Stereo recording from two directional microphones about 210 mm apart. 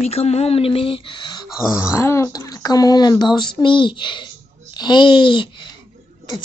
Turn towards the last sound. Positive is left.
turn(degrees=20)  # may be behind; listen again after turning